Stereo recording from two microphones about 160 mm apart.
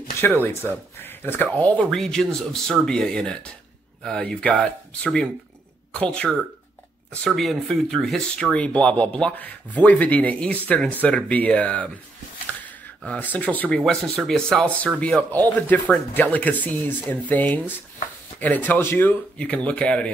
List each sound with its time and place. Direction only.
0.4 s speech: 15° left (ahead or behind)